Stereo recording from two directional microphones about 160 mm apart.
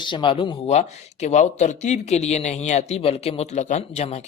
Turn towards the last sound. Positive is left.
turn(degrees=40)  # may be behind; listen again after turning